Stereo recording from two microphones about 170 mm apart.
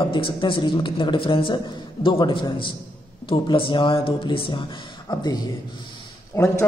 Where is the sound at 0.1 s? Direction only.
30° left (ahead or behind).